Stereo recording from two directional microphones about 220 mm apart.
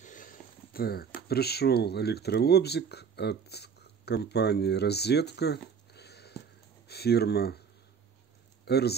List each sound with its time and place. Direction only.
0.0 s a sound: 35° left (ahead or behind)
1.3 s speech: 45° left (ahead or behind)
8.6 s speech: 45° left (ahead or behind)